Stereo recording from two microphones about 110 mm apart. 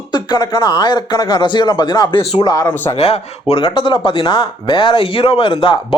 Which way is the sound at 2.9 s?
70° left (ahead or behind).